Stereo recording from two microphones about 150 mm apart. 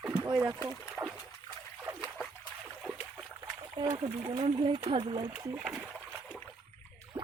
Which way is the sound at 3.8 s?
25° right (ahead or behind).